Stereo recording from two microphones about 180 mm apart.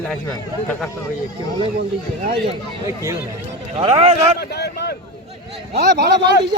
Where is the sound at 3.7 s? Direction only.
35° right (ahead or behind).